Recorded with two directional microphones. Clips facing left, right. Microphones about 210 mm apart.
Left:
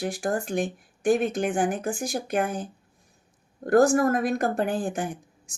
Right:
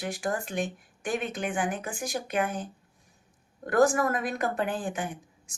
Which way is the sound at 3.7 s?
45° left (ahead or behind).